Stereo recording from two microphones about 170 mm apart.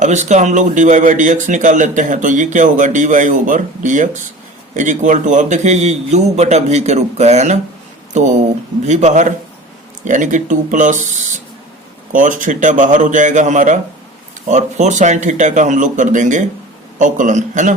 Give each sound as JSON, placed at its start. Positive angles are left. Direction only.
{"t": 0.0, "sound": "a man's voice", "side_deg": -45}